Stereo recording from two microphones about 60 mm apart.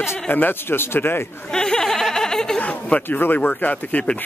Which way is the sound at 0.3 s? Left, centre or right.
Left.